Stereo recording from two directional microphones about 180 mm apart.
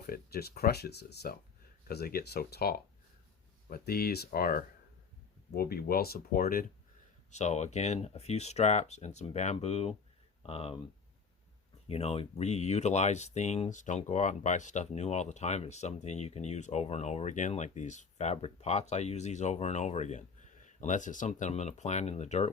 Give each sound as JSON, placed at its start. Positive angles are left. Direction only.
{"t": 0.1, "sound": "speech", "side_deg": 60}
{"t": 7.3, "sound": "speech", "side_deg": 40}
{"t": 11.9, "sound": "speech", "side_deg": 35}